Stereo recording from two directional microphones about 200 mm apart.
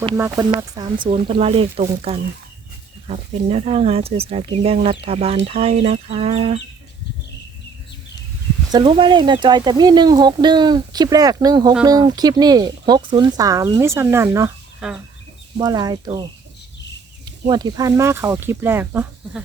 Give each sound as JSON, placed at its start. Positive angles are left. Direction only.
{"t": 0.7, "sound": "speech", "side_deg": -20}
{"t": 1.1, "sound": "speech", "side_deg": -30}
{"t": 8.7, "sound": "speech", "side_deg": -25}
{"t": 14.8, "sound": "speech", "side_deg": -5}
{"t": 15.5, "sound": "speech", "side_deg": -20}